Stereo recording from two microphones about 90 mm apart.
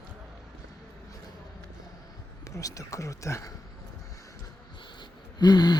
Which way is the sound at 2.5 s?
40° left (ahead or behind).